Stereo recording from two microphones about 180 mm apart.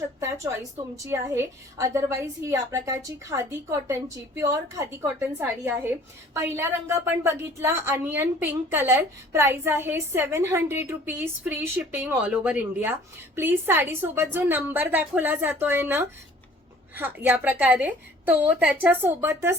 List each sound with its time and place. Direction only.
0.2 s a woman's voice: 15° right (ahead or behind)